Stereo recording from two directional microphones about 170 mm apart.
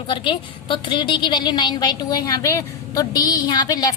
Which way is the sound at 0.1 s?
30° left (ahead or behind).